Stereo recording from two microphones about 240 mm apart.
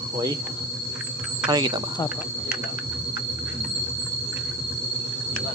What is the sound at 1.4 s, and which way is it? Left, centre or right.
Speech, centre.